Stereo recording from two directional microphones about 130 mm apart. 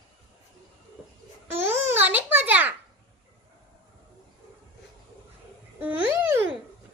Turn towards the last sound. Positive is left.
turn(degrees=-15)  # may be behind; listen again after turning